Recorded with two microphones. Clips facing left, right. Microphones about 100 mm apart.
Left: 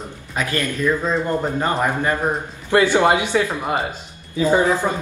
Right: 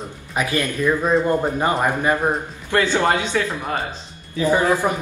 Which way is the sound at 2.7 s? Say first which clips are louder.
Left 3 dB; 15° left (ahead or behind).